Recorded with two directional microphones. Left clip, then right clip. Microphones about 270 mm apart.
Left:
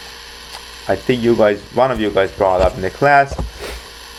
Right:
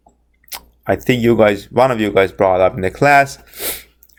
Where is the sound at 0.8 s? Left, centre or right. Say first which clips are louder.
Right 1 dB; right.